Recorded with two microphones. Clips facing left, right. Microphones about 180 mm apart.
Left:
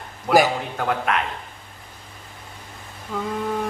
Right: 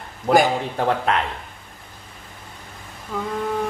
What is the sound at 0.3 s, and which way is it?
Speech, 35° right (ahead or behind).